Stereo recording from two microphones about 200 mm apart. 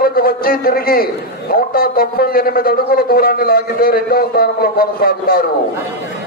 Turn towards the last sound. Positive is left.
turn(degrees=50)  # may be behind; listen again after turning